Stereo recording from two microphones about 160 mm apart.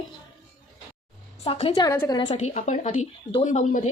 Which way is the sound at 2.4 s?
45° left (ahead or behind).